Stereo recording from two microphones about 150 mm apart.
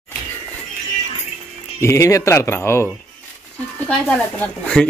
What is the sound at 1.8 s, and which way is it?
Speech, 20° left (ahead or behind).